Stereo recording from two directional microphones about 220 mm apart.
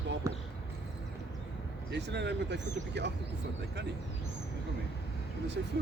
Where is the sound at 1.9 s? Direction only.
50° right (ahead or behind).